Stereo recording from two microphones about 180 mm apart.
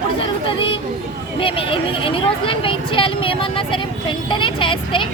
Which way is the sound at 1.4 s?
30° left (ahead or behind).